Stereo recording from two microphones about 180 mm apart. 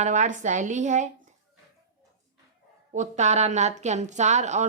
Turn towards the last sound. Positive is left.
turn(degrees=-40)  # may be behind; listen again after turning